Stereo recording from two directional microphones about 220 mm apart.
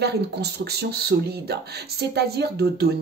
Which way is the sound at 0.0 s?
45° right (ahead or behind).